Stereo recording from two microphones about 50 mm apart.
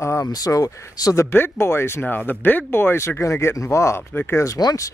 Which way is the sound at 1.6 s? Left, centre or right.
Left.